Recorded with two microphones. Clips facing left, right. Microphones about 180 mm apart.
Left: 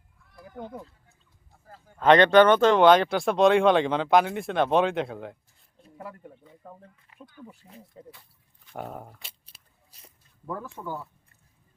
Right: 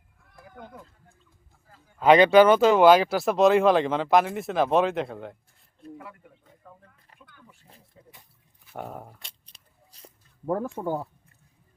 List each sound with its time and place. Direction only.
0.6 s speech: 25° left (ahead or behind)
1.6 s a sound: 45° left (ahead or behind)
2.0 s speech: 5° right (ahead or behind)
6.0 s speech: 40° left (ahead or behind)
7.1 s a sound: 40° right (ahead or behind)
8.0 s speech: 40° left (ahead or behind)
8.6 s speech: centre (ahead or behind)
10.5 s speech: 50° right (ahead or behind)